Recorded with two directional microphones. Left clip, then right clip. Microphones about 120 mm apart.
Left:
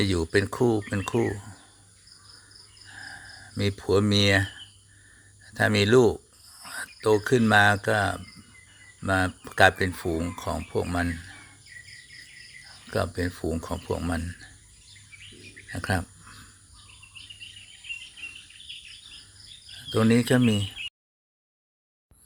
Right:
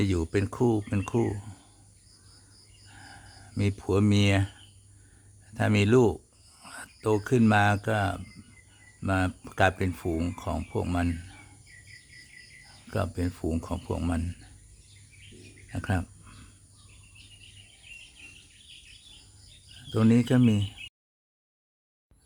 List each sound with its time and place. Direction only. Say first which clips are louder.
0.0 s speech: left 4 dB; 10° right (ahead or behind)
2.8 s a sound: left 8 dB; 5° right (ahead or behind)
4.1 s speech: left 5 dB; 15° right (ahead or behind)
5.5 s a sound: left 4 dB; 15° right (ahead or behind)
7.3 s speech: left 4 dB; 15° right (ahead or behind)
12.6 s speech: left 4 dB; 10° right (ahead or behind)
15.7 s speech: left 4 dB; 10° right (ahead or behind)
16.2 s bird: left 6 dB; 20° right (ahead or behind)
19.9 s speech: left 3 dB; 5° right (ahead or behind)